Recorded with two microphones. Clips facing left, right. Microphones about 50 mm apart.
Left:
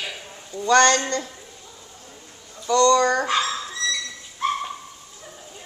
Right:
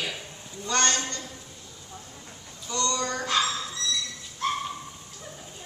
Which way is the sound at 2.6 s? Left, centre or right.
Left.